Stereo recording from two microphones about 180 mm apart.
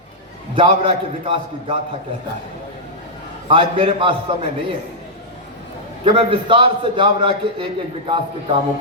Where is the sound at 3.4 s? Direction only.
30° right (ahead or behind).